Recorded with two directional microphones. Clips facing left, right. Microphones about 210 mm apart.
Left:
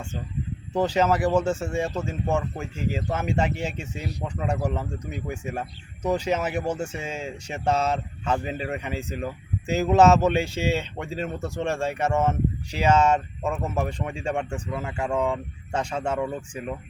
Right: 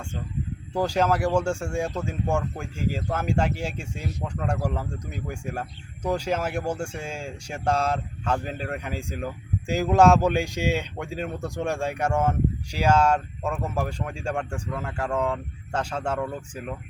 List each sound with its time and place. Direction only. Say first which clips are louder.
0.7 s speech: left 2 dB; 10° right (ahead or behind)
0.9 s speech: left 1 dB; 5° left (ahead or behind)